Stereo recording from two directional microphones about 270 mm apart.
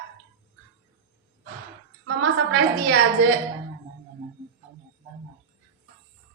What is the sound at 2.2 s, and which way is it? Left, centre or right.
Speech, right.